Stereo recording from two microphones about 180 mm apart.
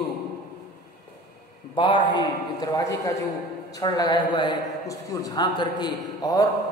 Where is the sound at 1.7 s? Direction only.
25° left (ahead or behind).